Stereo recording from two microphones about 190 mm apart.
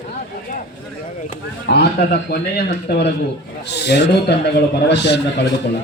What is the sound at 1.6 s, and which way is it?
A man's voice, 55° left (ahead or behind).